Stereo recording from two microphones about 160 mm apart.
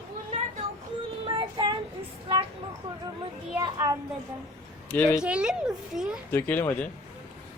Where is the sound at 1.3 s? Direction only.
30° right (ahead or behind).